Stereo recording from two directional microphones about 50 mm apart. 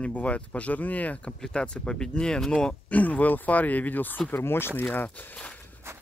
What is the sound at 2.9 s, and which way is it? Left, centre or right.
Speech, left.